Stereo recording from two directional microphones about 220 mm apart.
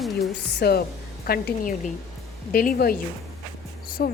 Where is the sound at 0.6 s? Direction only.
45° left (ahead or behind).